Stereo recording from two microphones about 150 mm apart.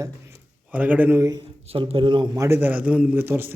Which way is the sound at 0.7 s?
10° right (ahead or behind).